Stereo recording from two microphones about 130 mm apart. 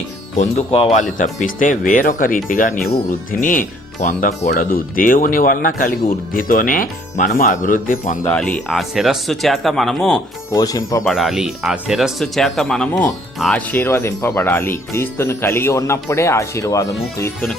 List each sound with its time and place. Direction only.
0.3 s speech: 55° left (ahead or behind)
1.2 s speech: 85° left
8.3 s speech: 5° left (ahead or behind)
10.5 s speech: 25° left (ahead or behind)
11.0 s speech: centre (ahead or behind); by 17.3 s 25° left (ahead or behind)